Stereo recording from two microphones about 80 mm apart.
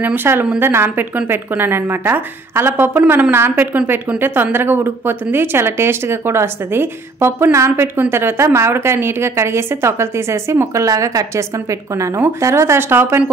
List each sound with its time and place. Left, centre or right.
0.0 s a woman's voice: right